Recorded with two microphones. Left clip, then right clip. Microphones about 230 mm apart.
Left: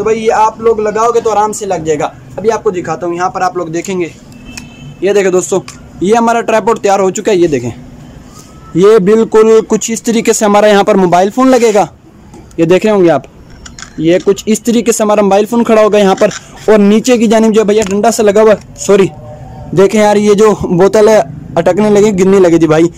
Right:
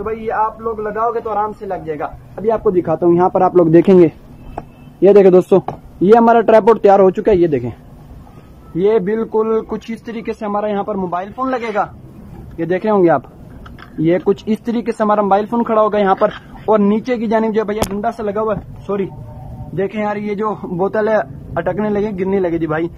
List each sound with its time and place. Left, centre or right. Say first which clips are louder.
0.0 s a man's voice: left 9 dB; centre
2.4 s a man's voice: left 4 dB; centre
2.7 s speech: right 2 dB; centre
5.0 s a man's voice: right 1 dB; centre
8.7 s a man's voice: left 9 dB; centre
10.1 s speech: left 14 dB; left
10.5 s speech: left 12 dB; left
11.1 s speech: left 12 dB; left
12.5 s a man's voice: left 7 dB; centre
18.4 s a man's voice: left 12 dB; left